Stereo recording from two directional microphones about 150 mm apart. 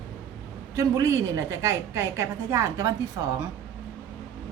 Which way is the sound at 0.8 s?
20° right (ahead or behind).